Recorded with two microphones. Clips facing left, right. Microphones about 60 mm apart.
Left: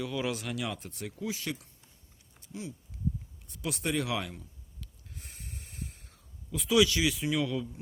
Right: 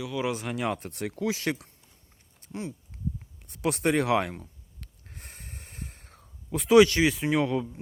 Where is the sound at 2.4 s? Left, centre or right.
Right.